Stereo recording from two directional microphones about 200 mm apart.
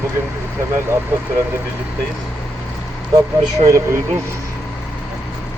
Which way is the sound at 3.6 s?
15° right (ahead or behind).